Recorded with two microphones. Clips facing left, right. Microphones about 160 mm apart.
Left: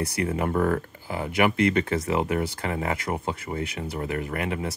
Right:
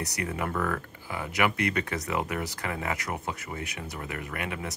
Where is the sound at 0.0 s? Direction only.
30° left (ahead or behind).